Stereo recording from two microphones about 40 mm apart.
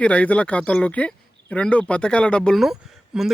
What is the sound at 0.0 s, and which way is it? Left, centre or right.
Speech, left.